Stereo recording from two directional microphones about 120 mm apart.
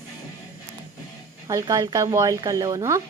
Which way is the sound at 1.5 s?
30° right (ahead or behind).